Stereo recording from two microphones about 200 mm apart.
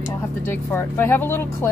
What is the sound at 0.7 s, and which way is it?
Speech, 10° left (ahead or behind).